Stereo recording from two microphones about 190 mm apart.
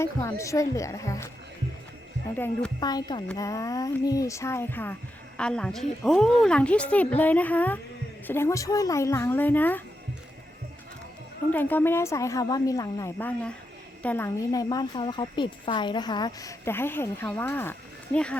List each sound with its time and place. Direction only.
0.0 s speech: 15° left (ahead or behind)
2.3 s speech: 5° left (ahead or behind)
2.8 s speech: 20° left (ahead or behind)
11.5 s speech: 10° left (ahead or behind)